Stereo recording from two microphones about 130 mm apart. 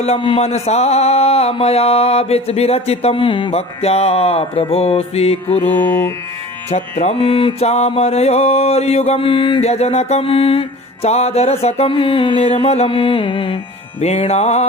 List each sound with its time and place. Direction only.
0.0 s speech: 50° left (ahead or behind)
5.6 s music: 15° left (ahead or behind)
7.0 s speech: 50° left (ahead or behind)
12.4 s speech: 55° left (ahead or behind)
14.0 s music: 55° left (ahead or behind)